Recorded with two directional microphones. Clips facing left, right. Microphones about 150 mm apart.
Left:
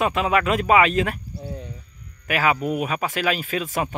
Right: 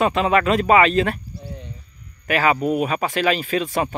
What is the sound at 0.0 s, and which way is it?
Speech, 5° left (ahead or behind).